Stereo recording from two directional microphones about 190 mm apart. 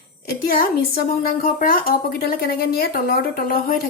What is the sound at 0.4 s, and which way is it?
A woman's voice, 55° left (ahead or behind).